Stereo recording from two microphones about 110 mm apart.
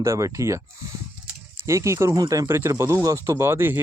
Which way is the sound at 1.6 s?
25° right (ahead or behind).